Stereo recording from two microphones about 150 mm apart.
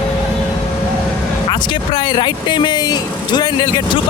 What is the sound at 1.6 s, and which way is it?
Speech, 30° left (ahead or behind).